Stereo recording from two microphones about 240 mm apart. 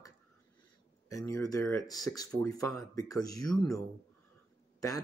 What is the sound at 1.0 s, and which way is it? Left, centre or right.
Speech, centre.